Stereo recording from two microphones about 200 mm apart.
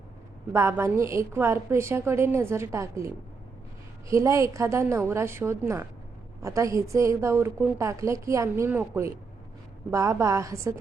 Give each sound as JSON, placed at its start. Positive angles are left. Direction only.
{"t": 0.5, "sound": "a woman's voice", "side_deg": -15}
{"t": 4.1, "sound": "a woman's voice", "side_deg": -15}